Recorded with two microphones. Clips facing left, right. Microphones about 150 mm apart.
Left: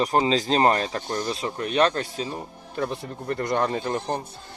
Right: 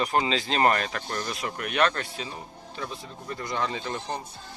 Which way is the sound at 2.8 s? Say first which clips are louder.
Left 9 dB; 60° left (ahead or behind).